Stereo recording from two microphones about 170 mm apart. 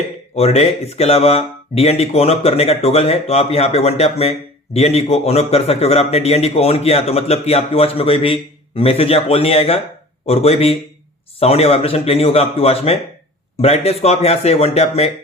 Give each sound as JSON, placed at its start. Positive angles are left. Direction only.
{"t": 0.3, "sound": "speech", "side_deg": 35}